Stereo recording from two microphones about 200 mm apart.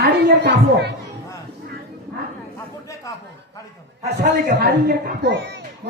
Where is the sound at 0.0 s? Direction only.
55° right (ahead or behind).